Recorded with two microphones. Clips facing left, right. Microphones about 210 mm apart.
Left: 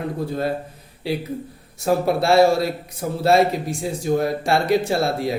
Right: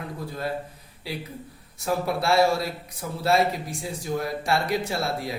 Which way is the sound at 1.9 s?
25° left (ahead or behind).